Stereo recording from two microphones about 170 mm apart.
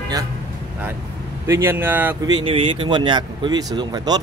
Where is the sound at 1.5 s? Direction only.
15° right (ahead or behind).